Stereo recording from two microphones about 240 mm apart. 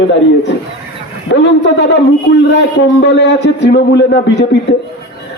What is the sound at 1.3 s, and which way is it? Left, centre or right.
A man's voice, left.